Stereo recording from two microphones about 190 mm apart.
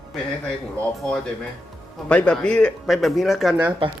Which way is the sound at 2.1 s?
5° left (ahead or behind).